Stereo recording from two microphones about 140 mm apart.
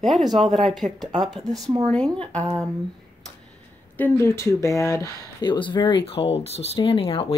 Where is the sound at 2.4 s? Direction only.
25° right (ahead or behind).